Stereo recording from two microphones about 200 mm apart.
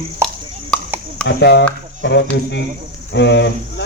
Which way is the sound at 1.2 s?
55° left (ahead or behind).